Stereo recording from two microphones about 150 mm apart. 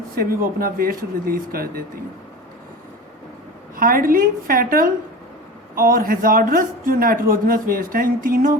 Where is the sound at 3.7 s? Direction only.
70° right (ahead or behind).